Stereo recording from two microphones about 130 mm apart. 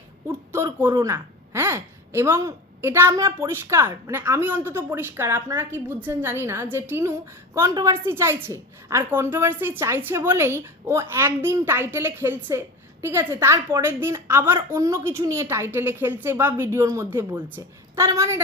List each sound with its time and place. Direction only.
0.3 s a woman's voice: 20° right (ahead or behind)